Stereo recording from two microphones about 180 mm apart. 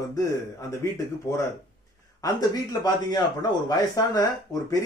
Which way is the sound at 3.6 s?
20° left (ahead or behind).